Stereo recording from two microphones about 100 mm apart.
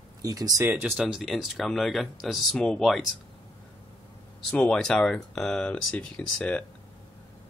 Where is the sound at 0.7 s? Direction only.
20° right (ahead or behind).